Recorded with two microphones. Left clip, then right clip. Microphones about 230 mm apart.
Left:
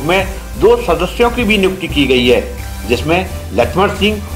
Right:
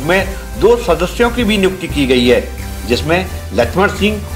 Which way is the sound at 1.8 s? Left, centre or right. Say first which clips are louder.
Left 2 dB; right.